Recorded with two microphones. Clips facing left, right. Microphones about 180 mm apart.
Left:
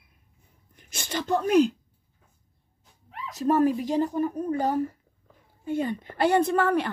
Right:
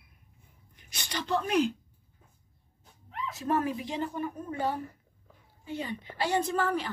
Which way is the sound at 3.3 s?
40° left (ahead or behind).